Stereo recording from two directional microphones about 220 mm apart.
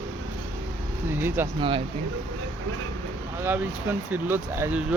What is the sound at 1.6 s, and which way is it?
Speech, 25° right (ahead or behind).